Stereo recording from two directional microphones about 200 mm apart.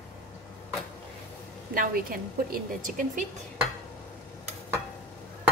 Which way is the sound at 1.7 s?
45° right (ahead or behind).